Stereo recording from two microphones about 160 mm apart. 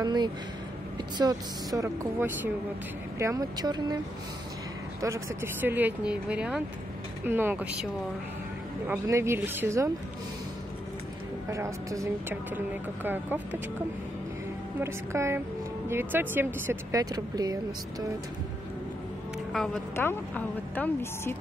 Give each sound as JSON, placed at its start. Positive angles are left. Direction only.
{"t": 0.0, "sound": "speech", "side_deg": -25}
{"t": 5.0, "sound": "speech", "side_deg": -15}
{"t": 11.4, "sound": "speech", "side_deg": -20}
{"t": 14.8, "sound": "speech", "side_deg": -15}
{"t": 19.5, "sound": "a woman's voice", "side_deg": 5}